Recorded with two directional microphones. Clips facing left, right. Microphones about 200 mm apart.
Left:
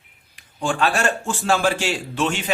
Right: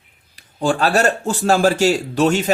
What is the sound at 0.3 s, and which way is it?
Speech, 40° right (ahead or behind).